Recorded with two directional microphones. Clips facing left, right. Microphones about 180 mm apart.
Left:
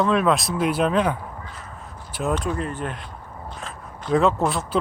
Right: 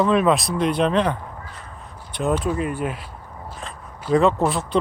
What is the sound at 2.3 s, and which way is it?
Speech, 5° right (ahead or behind).